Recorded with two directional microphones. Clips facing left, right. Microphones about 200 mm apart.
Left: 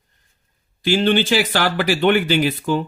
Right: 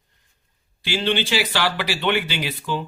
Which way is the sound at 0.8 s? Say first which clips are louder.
Left 6 dB; 45° left (ahead or behind).